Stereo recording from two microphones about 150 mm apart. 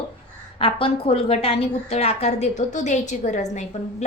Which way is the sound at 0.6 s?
40° left (ahead or behind).